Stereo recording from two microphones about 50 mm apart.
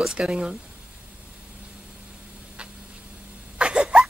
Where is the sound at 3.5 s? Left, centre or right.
Centre.